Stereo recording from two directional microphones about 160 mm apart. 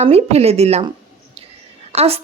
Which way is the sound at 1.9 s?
40° right (ahead or behind).